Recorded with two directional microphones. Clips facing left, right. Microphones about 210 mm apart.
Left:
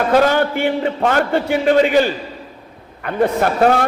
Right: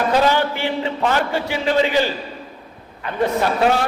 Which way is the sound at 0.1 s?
50° left (ahead or behind).